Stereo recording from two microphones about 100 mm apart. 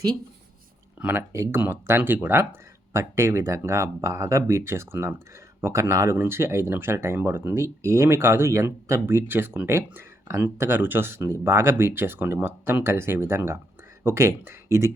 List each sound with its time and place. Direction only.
0.9 s speech: 15° right (ahead or behind)
1.3 s speech: 25° right (ahead or behind)